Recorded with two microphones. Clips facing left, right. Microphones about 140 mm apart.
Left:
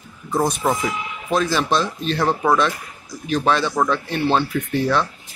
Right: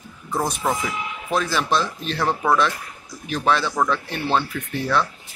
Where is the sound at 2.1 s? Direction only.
15° left (ahead or behind).